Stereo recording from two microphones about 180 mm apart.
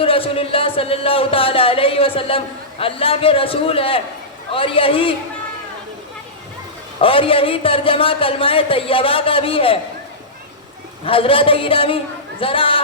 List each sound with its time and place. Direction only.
0.0 s a man's voice: 30° left (ahead or behind)
7.0 s speech: 30° left (ahead or behind)
11.0 s speech: 30° left (ahead or behind)